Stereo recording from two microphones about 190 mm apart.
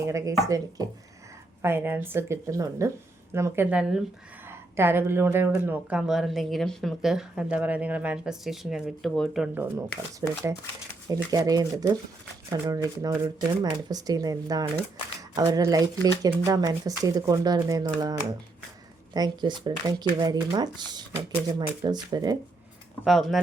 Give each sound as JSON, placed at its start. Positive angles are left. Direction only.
{"t": 0.0, "sound": "a woman's voice", "side_deg": -15}
{"t": 9.6, "sound": "a woman's voice", "side_deg": -15}
{"t": 23.0, "sound": "speech", "side_deg": 0}